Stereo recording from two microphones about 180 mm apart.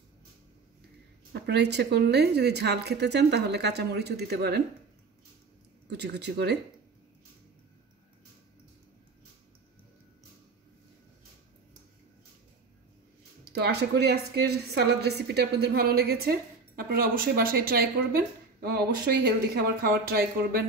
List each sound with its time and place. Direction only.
1.3 s a woman's voice: 65° right (ahead or behind)
5.9 s a woman's voice: 65° right (ahead or behind)
13.4 s speech: 60° right (ahead or behind)